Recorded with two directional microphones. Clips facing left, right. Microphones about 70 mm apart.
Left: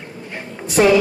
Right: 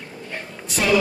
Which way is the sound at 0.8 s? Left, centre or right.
Left.